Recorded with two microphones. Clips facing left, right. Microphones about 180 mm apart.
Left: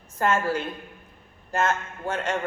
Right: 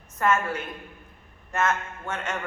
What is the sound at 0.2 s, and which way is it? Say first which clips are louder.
A man's voice: left 1 dB; 30° left (ahead or behind).